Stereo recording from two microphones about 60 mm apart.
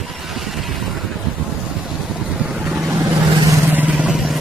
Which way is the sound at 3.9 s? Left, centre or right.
Right.